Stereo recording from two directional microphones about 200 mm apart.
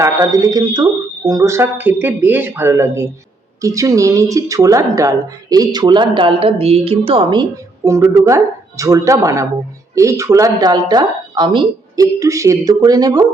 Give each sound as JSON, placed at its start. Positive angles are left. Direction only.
{"t": 0.0, "sound": "a woman's voice", "side_deg": -15}